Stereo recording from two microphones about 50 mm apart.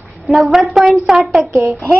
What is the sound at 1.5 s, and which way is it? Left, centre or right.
Speech, right.